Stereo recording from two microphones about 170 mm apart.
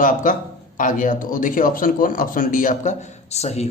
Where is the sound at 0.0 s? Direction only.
50° left (ahead or behind).